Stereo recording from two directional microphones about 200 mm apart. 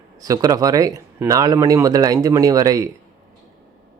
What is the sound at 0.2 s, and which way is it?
Speech, 20° right (ahead or behind).